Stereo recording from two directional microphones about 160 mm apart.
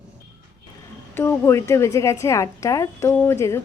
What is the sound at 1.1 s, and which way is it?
A woman's voice, 15° left (ahead or behind).